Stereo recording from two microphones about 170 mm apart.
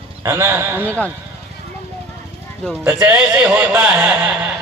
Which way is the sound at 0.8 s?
10° left (ahead or behind).